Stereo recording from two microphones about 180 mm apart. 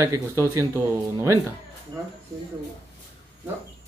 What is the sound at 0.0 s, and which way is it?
Speech, 15° right (ahead or behind).